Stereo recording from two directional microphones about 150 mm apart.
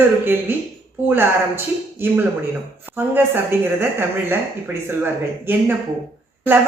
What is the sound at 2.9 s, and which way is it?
Speech, 15° right (ahead or behind).